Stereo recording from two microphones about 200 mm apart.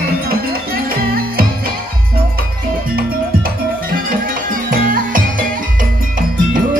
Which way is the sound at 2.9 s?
45° right (ahead or behind).